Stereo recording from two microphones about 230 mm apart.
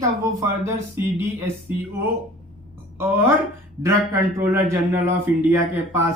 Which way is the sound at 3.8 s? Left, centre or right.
Centre.